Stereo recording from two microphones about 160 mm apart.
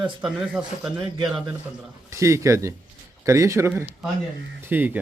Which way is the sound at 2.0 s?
20° right (ahead or behind).